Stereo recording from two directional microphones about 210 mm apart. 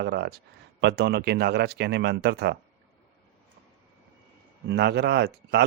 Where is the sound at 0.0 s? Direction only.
50° right (ahead or behind).